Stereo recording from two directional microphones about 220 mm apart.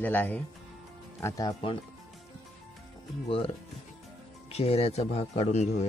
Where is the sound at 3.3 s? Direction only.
25° left (ahead or behind).